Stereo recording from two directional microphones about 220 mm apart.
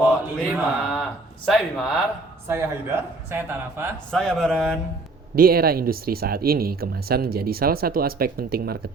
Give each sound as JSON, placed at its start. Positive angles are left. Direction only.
{"t": 0.3, "sound": "mantra", "side_deg": 0}
{"t": 1.5, "sound": "speech", "side_deg": 0}
{"t": 2.5, "sound": "speech", "side_deg": -10}
{"t": 4.1, "sound": "speech", "side_deg": 0}
{"t": 5.3, "sound": "speech", "side_deg": -45}